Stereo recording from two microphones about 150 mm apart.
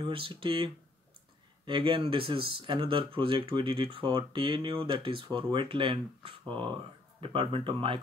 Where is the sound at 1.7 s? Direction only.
35° right (ahead or behind).